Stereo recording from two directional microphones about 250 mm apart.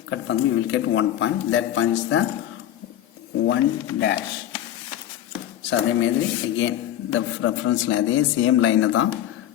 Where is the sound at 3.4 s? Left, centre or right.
Left.